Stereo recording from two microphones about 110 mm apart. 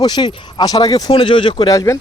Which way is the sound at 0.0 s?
40° left (ahead or behind).